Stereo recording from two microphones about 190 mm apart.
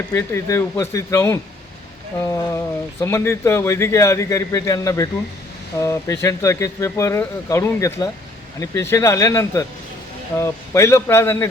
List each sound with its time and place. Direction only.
0.1 s speech: 15° left (ahead or behind)